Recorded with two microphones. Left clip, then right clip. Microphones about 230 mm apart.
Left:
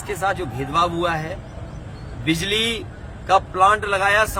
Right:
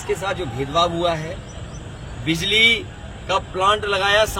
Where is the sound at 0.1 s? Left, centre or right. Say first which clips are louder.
Left 1 dB; centre.